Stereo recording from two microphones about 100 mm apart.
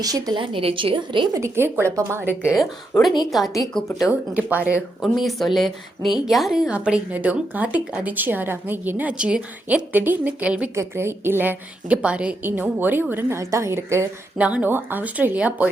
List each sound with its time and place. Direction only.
0.0 s a woman's voice: 40° right (ahead or behind)
0.5 s a woman's voice: 65° right (ahead or behind)
1.3 s a woman's voice: 25° right (ahead or behind)
3.2 s speech: centre (ahead or behind)
4.4 s a woman's voice: 15° right (ahead or behind)
5.0 s a woman's voice: centre (ahead or behind)
10.8 s a woman's voice: 25° right (ahead or behind)
14.3 s a woman's voice: 15° right (ahead or behind)